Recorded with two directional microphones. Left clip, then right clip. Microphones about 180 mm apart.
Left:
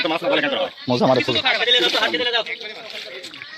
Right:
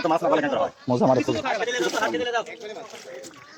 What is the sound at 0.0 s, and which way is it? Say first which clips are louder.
Speech: left 2 dB; 25° right (ahead or behind).